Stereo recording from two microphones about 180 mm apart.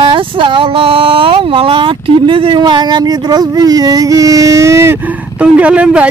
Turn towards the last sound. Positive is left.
turn(degrees=-5)  # may be behind; listen again after turning